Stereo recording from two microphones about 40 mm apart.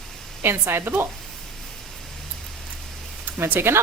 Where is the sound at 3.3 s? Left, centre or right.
Right.